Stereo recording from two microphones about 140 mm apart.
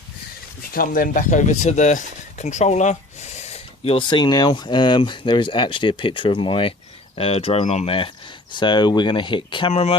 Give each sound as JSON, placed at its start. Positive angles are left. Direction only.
{"t": 0.7, "sound": "speech", "side_deg": 90}